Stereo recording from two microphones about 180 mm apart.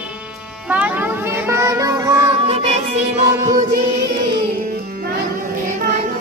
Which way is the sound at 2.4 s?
35° right (ahead or behind).